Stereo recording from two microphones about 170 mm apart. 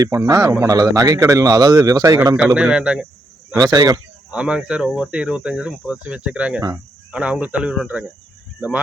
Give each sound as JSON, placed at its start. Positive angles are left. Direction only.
{"t": 0.0, "sound": "speech", "side_deg": -20}
{"t": 2.6, "sound": "speech", "side_deg": -5}
{"t": 3.6, "sound": "speech", "side_deg": -20}
{"t": 4.3, "sound": "speech", "side_deg": -5}